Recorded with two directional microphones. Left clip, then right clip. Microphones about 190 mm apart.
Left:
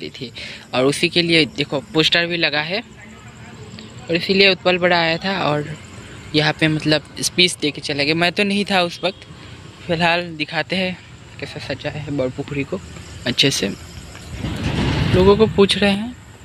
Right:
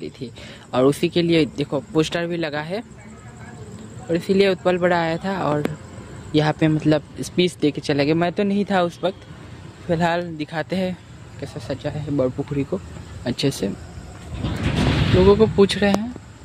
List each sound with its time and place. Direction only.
0.0 s speech: 10° right (ahead or behind)
4.1 s speech: 10° right (ahead or behind)
7.7 s speech: 30° right (ahead or behind)
8.2 s speech: 10° right (ahead or behind)
12.7 s speech: 5° right (ahead or behind)
14.6 s vehicle: 35° left (ahead or behind)
15.1 s speech: 5° right (ahead or behind)